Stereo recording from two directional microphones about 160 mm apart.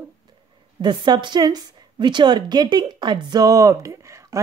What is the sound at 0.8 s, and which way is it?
A woman's voice, 25° right (ahead or behind).